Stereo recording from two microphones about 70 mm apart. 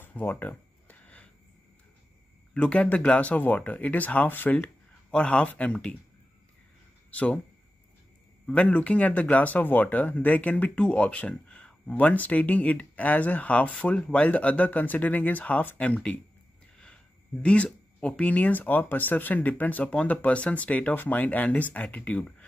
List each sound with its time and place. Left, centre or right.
0.0 s a sound: left
2.5 s speech: centre
5.1 s speech: centre
7.1 s speech: centre
8.5 s speech: centre
16.7 s a sound: centre
18.0 s speech: centre